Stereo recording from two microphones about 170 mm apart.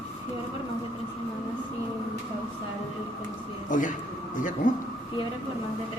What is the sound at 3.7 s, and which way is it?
Speech, 50° left (ahead or behind).